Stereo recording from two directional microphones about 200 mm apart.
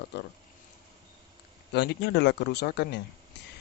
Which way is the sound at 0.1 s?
55° left (ahead or behind).